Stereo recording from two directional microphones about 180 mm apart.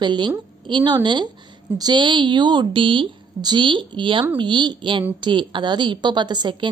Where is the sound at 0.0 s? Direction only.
25° right (ahead or behind).